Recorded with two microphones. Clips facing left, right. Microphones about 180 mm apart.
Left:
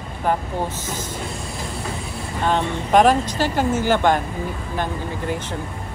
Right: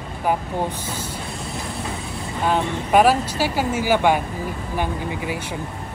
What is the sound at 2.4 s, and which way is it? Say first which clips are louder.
Speech: even; 5° right (ahead or behind).